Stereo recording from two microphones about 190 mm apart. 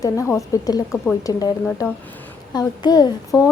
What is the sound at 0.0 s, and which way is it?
A woman's voice, 15° left (ahead or behind).